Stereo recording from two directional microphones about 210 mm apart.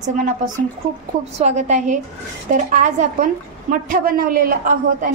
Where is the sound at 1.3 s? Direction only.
35° right (ahead or behind).